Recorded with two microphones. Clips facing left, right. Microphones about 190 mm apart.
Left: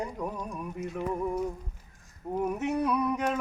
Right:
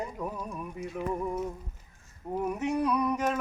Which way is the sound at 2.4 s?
Centre (ahead or behind).